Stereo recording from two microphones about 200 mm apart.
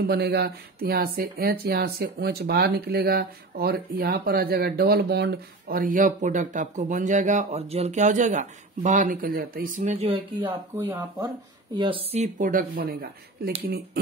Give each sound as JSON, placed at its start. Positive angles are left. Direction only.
{"t": 0.0, "sound": "speech", "side_deg": -55}
{"t": 10.1, "sound": "speech", "side_deg": -20}